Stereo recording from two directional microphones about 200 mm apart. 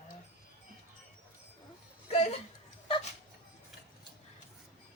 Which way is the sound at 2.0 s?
30° left (ahead or behind).